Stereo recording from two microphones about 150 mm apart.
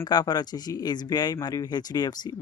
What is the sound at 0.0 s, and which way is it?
Speech, 25° left (ahead or behind).